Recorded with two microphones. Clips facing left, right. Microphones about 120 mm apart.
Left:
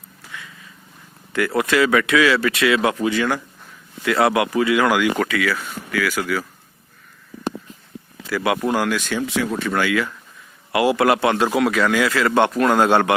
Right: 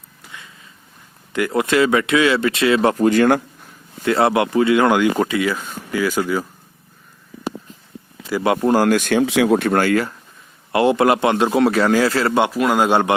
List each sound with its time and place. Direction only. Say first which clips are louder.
0.3 s a sound: left 2 dB; 25° right (ahead or behind)
1.3 s speech: right 1 dB; 20° right (ahead or behind)
3.0 s speech: right 6 dB; 50° right (ahead or behind)
4.0 s speech: right 2 dB; 30° right (ahead or behind)
8.3 s speech: right 4 dB; 25° right (ahead or behind)
9.0 s speech: right 7 dB; 60° right (ahead or behind); by 10.2 s 40° right (ahead or behind)
10.7 s speech: right 2 dB; 25° right (ahead or behind)
12.3 s speech: even; 10° right (ahead or behind)